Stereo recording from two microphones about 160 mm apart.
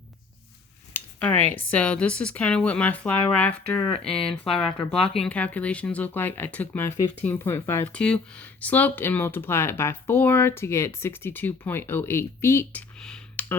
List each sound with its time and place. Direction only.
0.9 s speech: 10° left (ahead or behind)
4.2 s speech: 35° left (ahead or behind)
5.1 s speech: 5° left (ahead or behind)
13.0 s a sound: 5° left (ahead or behind)